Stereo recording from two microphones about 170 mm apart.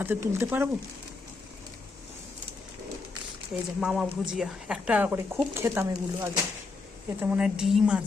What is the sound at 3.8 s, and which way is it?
A woman's voice, 5° right (ahead or behind).